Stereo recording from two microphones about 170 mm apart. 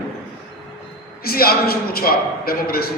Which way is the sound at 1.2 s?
60° left (ahead or behind).